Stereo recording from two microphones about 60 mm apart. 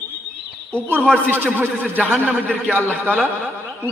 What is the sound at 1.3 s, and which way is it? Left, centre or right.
A man's voice, right.